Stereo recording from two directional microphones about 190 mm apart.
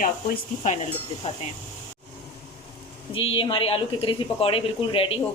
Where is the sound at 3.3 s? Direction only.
30° left (ahead or behind).